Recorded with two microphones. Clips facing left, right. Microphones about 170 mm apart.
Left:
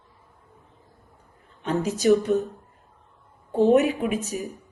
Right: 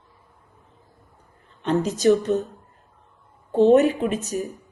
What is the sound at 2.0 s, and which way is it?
Speech, centre (ahead or behind).